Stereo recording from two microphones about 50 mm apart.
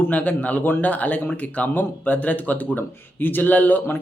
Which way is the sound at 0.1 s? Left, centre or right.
Left.